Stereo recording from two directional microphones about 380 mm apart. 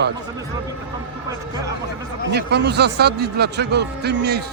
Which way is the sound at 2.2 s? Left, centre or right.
Right.